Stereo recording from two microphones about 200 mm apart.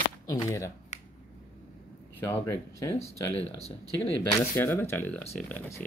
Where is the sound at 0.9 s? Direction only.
35° left (ahead or behind).